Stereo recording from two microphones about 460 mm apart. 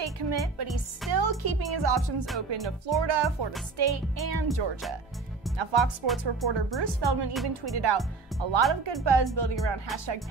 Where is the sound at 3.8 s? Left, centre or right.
Right.